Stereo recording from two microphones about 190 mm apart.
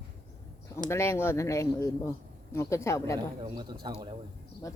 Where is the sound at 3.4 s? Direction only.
20° right (ahead or behind).